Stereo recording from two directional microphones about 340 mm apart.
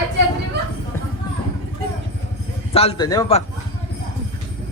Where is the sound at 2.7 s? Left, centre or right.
Centre.